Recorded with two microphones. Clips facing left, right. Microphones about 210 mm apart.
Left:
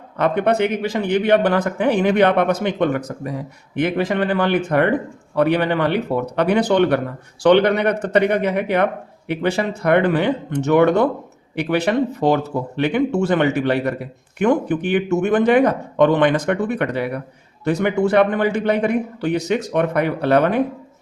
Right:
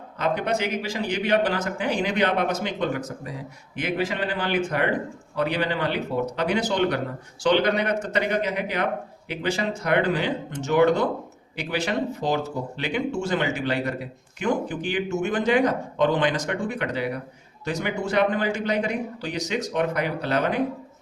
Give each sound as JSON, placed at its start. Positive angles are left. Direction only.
{"t": 0.2, "sound": "speech", "side_deg": 60}